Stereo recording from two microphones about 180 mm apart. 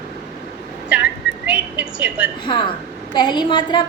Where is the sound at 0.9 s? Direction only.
5° right (ahead or behind).